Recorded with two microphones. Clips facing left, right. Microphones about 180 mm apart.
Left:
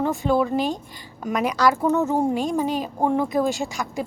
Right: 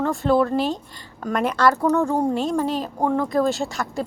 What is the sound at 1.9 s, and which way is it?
Speech, 20° left (ahead or behind).